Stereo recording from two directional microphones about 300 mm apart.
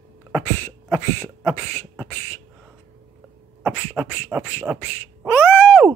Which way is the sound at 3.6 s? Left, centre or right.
Centre.